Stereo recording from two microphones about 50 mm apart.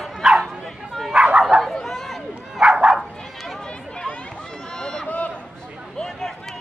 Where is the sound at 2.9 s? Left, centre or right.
Centre.